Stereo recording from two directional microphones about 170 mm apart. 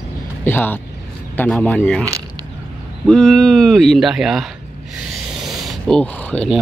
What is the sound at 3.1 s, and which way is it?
Speech, 5° left (ahead or behind).